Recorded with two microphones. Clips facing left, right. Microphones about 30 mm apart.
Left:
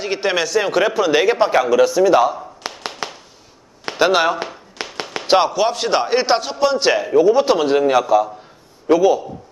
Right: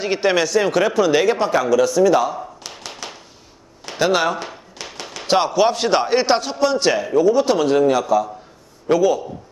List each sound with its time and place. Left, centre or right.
0.0 s a man's voice: centre
2.6 s clapping: left
3.0 s a sound: left
4.0 s a man's voice: centre
4.8 s tap: left
5.2 s speech: centre
5.5 s a man's voice: centre